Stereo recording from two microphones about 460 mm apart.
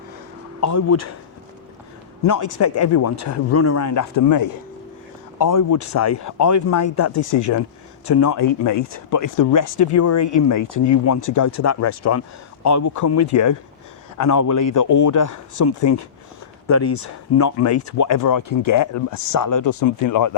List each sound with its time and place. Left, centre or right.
0.6 s speech: left
2.2 s speech: left